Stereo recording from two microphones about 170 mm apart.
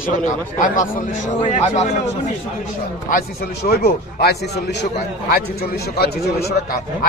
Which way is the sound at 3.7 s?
70° left (ahead or behind).